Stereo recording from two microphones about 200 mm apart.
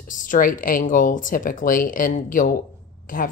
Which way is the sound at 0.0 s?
40° left (ahead or behind).